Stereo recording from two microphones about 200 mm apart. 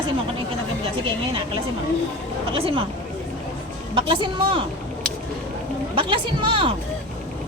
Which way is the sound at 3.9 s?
25° right (ahead or behind).